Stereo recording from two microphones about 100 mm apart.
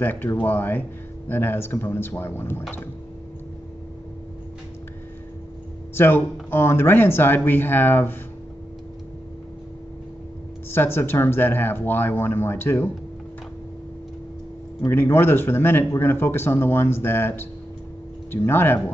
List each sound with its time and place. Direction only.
0.0 s speech: 20° left (ahead or behind)
5.9 s speech: 20° left (ahead or behind)
10.7 s speech: 20° left (ahead or behind)
14.9 s speech: 20° left (ahead or behind)